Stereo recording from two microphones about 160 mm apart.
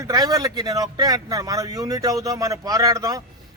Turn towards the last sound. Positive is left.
turn(degrees=-20)  # may be behind; listen again after turning